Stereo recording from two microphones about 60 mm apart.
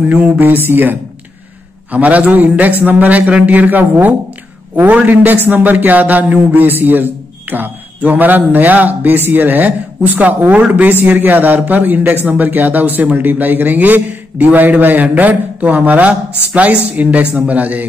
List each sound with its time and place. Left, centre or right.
0.1 s a man's voice: right